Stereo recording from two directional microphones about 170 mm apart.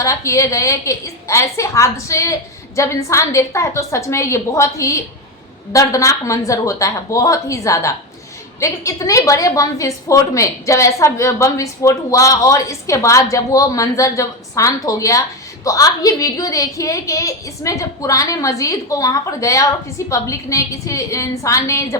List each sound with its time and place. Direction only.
0.0 s a woman's voice: 20° left (ahead or behind)